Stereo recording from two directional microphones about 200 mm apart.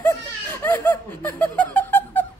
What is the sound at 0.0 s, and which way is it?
Laughter, 10° left (ahead or behind).